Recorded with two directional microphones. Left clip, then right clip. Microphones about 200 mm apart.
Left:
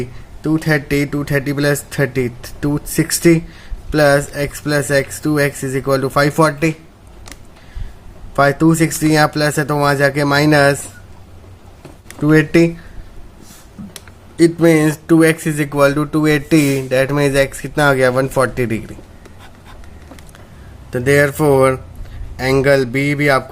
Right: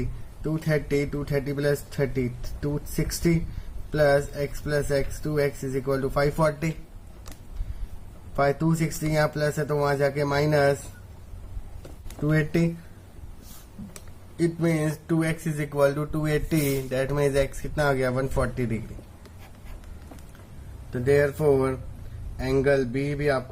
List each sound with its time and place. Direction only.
0.4 s speech: 40° left (ahead or behind)
8.4 s speech: 40° left (ahead or behind)
12.2 s speech: 35° left (ahead or behind)
14.3 s speech: 40° left (ahead or behind)
20.9 s speech: 45° left (ahead or behind)